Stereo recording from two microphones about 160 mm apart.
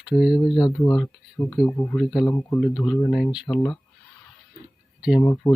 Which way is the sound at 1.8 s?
25° left (ahead or behind).